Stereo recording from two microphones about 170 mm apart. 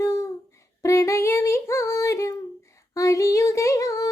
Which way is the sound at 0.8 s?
20° left (ahead or behind).